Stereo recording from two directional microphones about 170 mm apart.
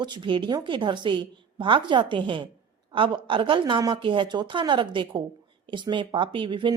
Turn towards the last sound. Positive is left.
turn(degrees=-30)  # may be behind; listen again after turning